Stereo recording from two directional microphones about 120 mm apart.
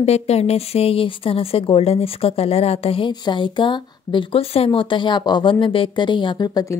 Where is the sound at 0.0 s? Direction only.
60° left (ahead or behind).